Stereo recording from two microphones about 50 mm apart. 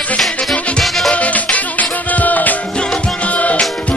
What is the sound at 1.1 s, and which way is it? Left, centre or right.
Music, left.